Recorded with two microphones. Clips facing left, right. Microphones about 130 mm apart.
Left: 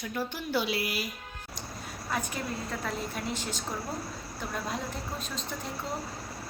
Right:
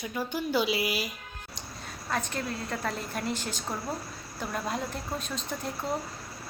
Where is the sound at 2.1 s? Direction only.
5° left (ahead or behind).